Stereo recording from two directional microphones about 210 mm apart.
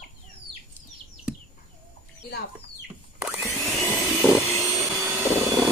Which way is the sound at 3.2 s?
15° right (ahead or behind).